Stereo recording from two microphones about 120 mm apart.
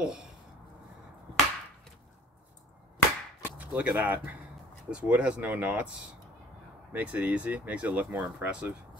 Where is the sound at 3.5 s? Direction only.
15° right (ahead or behind).